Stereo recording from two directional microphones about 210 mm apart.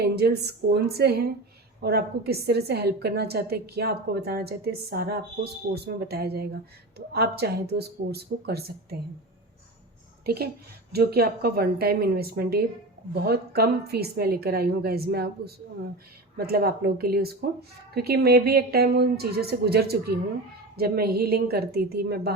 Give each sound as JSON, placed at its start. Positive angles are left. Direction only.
{"t": 0.0, "sound": "a woman's voice", "side_deg": -50}
{"t": 10.2, "sound": "a woman's voice", "side_deg": -50}